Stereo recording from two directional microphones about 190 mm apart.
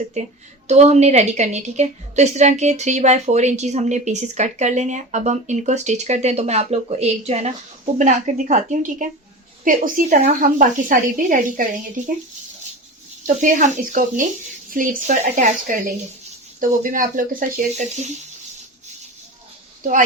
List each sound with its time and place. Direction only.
0.2 s a woman's voice: 35° right (ahead or behind)
13.2 s a woman's voice: 40° right (ahead or behind)
19.8 s a woman's voice: 45° right (ahead or behind)